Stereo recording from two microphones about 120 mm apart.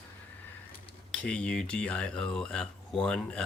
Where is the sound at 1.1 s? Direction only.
10° left (ahead or behind).